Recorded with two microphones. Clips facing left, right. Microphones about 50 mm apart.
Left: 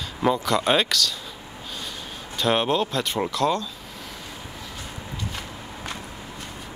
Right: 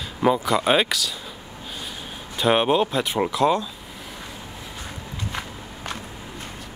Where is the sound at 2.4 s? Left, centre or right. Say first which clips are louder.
Right 3 dB; centre.